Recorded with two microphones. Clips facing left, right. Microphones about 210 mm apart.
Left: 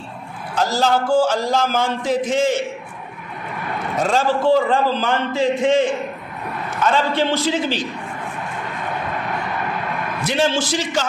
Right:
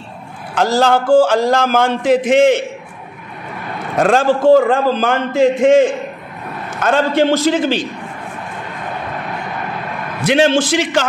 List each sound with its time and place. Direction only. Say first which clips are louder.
0.6 s a man's voice: right 5 dB; 65° right (ahead or behind)
4.0 s a man's voice: right 6 dB; 65° right (ahead or behind)
4.4 s a man's voice: right 6 dB; 45° right (ahead or behind)
10.2 s a man's voice: right 7 dB; 65° right (ahead or behind)